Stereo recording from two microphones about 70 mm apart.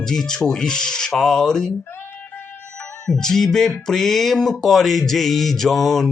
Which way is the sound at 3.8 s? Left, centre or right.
Centre.